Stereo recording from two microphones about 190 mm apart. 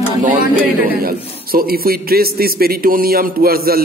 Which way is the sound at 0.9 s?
50° right (ahead or behind).